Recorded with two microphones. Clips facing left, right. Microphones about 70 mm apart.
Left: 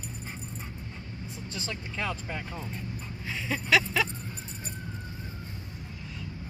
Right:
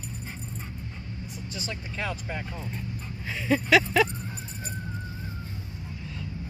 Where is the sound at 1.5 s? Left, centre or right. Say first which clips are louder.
Right 1 dB; centre.